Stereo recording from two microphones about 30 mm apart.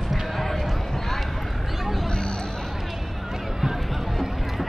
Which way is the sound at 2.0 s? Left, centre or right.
Left.